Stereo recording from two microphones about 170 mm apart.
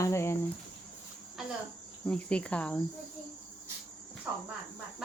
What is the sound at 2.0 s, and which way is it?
Speech, 5° left (ahead or behind).